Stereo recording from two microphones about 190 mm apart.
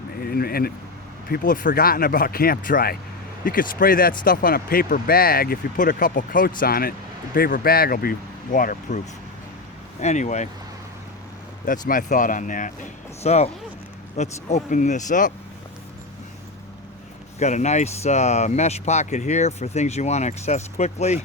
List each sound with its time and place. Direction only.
0.2 s speech: 50° left (ahead or behind)
10.0 s speech: 40° left (ahead or behind)
11.6 s speech: 45° left (ahead or behind)
17.4 s speech: 40° left (ahead or behind)